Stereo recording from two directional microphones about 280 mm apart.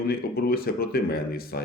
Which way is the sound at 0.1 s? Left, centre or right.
Left.